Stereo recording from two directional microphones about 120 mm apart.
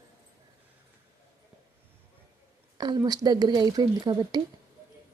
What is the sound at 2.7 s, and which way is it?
Speech, 35° right (ahead or behind).